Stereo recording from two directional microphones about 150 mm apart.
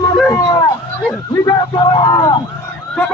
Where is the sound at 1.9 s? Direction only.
30° left (ahead or behind).